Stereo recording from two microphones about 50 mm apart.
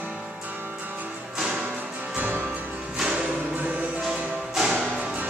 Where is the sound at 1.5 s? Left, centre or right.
Right.